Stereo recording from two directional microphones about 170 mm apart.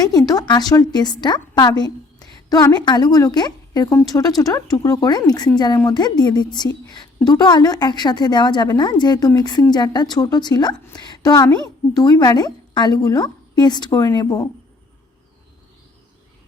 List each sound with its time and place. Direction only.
0.0 s a woman's voice: 20° left (ahead or behind)